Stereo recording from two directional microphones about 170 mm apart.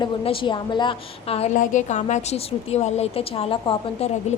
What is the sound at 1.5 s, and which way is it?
A woman's voice, 45° left (ahead or behind).